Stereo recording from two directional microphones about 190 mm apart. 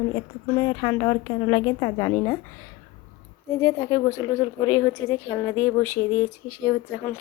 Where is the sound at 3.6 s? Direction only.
15° left (ahead or behind).